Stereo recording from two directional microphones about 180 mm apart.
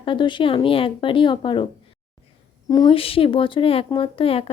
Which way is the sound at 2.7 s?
25° left (ahead or behind).